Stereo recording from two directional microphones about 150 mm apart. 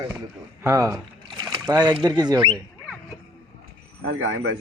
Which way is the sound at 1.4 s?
25° right (ahead or behind).